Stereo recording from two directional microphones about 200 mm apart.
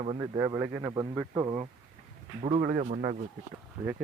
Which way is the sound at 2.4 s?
35° right (ahead or behind).